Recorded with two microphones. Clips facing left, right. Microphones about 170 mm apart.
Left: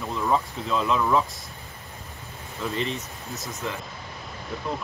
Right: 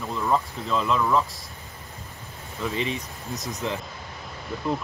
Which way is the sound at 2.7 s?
10° right (ahead or behind).